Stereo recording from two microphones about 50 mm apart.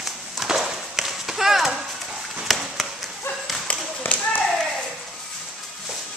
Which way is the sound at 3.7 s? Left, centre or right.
Left.